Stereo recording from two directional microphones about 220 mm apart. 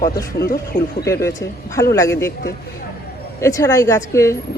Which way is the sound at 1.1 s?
10° left (ahead or behind).